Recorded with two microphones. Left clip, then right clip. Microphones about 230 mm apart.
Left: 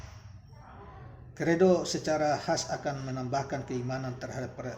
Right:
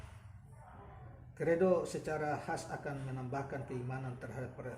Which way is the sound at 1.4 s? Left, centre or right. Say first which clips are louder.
Left 6 dB; left.